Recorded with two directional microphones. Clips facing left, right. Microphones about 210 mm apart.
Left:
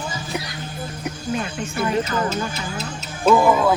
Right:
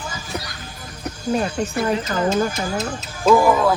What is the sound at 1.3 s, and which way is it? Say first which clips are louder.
Speech: right 6 dB; 40° right (ahead or behind).